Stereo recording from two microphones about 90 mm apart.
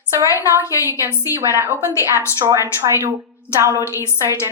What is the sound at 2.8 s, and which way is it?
Speech, 30° right (ahead or behind).